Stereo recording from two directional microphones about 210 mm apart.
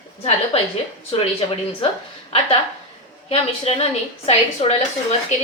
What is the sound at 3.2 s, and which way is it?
Speech, 30° left (ahead or behind).